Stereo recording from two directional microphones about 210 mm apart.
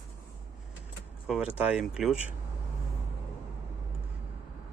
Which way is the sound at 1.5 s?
5° right (ahead or behind).